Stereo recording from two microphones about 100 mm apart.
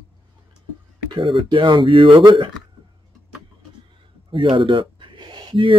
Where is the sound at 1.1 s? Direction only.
60° right (ahead or behind).